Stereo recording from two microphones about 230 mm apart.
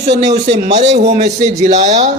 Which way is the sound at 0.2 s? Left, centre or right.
Right.